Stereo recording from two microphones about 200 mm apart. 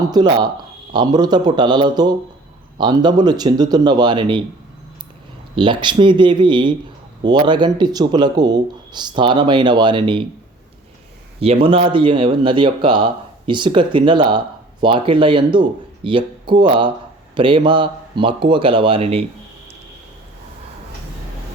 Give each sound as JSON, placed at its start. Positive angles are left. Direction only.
{"t": 0.1, "sound": "speech", "side_deg": -20}
{"t": 5.5, "sound": "speech", "side_deg": -25}
{"t": 11.3, "sound": "speech", "side_deg": -30}